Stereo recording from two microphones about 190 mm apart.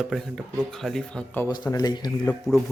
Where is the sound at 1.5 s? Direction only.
20° left (ahead or behind).